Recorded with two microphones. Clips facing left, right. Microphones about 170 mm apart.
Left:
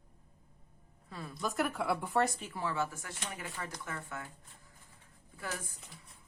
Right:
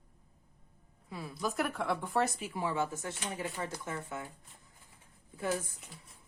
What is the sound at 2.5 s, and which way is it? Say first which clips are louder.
Speech: right 3 dB; 15° right (ahead or behind).